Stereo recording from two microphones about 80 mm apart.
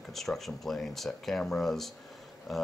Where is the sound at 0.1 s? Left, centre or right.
Centre.